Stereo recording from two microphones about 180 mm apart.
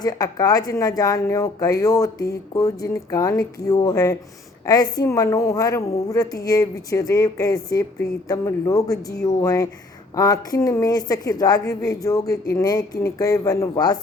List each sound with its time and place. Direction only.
0.0 s a woman's voice: 20° left (ahead or behind)